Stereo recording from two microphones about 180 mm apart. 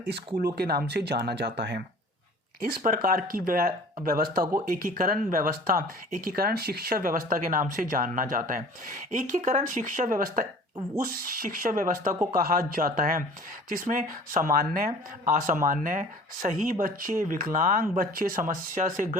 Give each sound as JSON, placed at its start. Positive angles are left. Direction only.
{"t": 0.5, "sound": "speech", "side_deg": -60}
{"t": 2.6, "sound": "speech", "side_deg": -55}